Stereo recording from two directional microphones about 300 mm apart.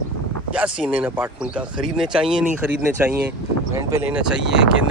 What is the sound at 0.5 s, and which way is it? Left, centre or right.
Speech, centre.